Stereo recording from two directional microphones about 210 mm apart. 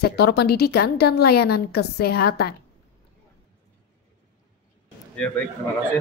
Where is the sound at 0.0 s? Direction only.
50° left (ahead or behind).